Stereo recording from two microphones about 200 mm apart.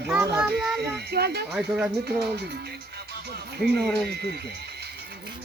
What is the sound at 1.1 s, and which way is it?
Speech, 55° right (ahead or behind).